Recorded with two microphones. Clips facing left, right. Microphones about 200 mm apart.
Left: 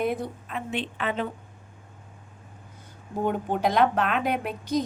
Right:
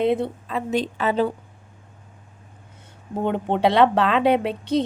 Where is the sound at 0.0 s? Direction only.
25° right (ahead or behind).